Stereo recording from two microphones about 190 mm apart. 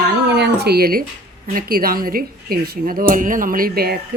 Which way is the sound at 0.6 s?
55° right (ahead or behind).